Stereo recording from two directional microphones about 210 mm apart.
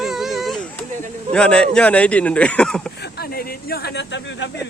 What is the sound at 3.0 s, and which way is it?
Speech, 45° left (ahead or behind).